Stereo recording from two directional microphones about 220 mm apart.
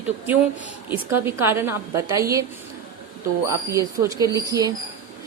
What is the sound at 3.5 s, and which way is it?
A woman's voice, 15° right (ahead or behind).